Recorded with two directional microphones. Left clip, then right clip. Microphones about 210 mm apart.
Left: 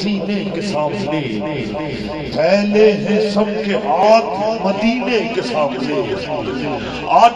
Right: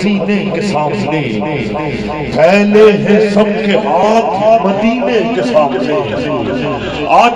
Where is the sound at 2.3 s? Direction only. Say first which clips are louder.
Right 6 dB; 20° right (ahead or behind).